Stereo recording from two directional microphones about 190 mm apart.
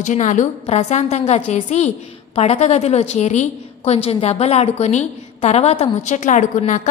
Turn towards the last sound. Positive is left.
turn(degrees=40)  # may be behind; listen again after turning